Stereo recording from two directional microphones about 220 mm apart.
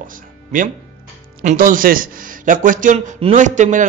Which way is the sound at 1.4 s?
35° right (ahead or behind).